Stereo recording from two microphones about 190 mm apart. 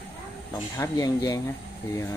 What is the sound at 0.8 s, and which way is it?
Speech, 20° left (ahead or behind).